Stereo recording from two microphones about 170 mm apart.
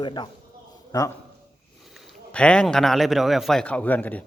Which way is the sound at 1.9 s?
Centre (ahead or behind).